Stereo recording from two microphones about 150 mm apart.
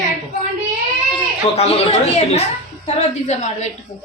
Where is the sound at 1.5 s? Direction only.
40° left (ahead or behind).